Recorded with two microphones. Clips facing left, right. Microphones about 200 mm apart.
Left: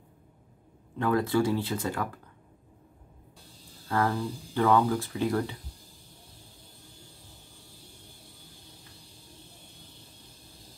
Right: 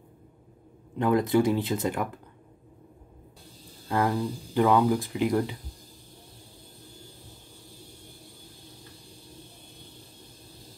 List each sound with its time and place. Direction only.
0.9 s speech: 15° right (ahead or behind)
3.9 s speech: 15° right (ahead or behind)